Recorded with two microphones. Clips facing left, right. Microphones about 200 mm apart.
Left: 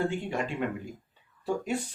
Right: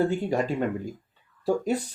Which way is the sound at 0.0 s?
40° right (ahead or behind).